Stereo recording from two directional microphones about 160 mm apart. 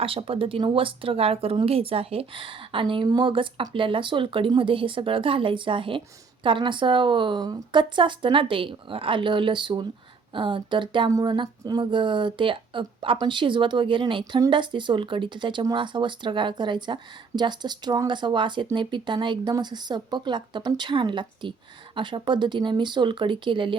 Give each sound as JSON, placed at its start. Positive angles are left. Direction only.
{"t": 0.0, "sound": "speech", "side_deg": -35}